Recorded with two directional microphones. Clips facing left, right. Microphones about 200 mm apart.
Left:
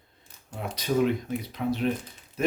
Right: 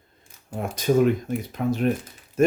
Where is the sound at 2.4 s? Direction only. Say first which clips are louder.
Right 7 dB; 45° right (ahead or behind).